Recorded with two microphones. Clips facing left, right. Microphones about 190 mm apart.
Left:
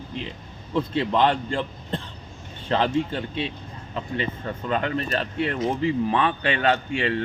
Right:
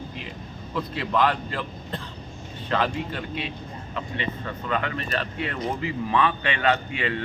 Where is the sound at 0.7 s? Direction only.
25° left (ahead or behind).